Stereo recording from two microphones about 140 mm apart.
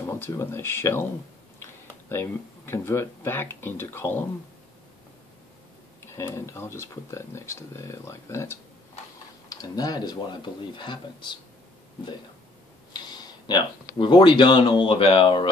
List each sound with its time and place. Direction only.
0.0 s speech: 20° left (ahead or behind)
2.0 s speech: 20° left (ahead or behind)
6.1 s speech: 20° left (ahead or behind)
12.9 s speech: 30° left (ahead or behind)